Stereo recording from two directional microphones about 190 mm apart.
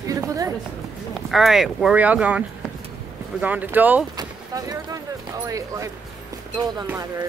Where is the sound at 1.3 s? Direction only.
Centre (ahead or behind).